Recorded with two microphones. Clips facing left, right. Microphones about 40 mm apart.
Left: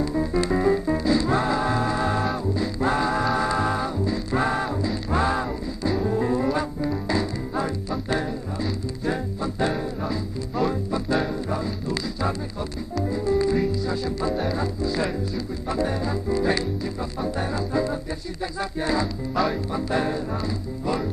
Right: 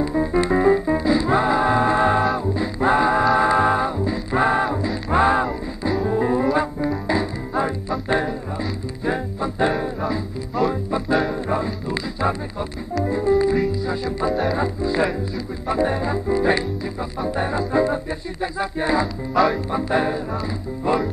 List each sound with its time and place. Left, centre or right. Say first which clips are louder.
0.0 s music: right 4 dB; right
13.7 s speech: right 2 dB; centre
14.3 s music: right 4 dB; centre
14.6 s music: right 4 dB; right
19.3 s music: right 6 dB; centre
19.7 s music: right 4 dB; right